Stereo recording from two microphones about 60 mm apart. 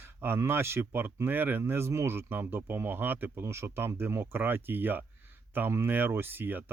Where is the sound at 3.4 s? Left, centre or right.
Right.